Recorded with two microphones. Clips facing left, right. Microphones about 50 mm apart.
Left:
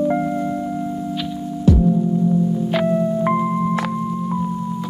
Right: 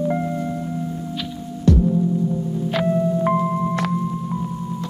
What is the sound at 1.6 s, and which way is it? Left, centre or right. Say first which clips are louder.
Music: left 1 dB; centre.